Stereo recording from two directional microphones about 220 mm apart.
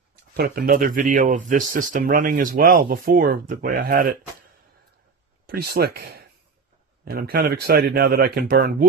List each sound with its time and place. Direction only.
0.1 s speech: 45° right (ahead or behind)
5.5 s speech: 45° right (ahead or behind)